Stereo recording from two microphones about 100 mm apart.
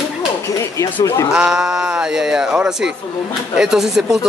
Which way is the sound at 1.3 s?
5° right (ahead or behind).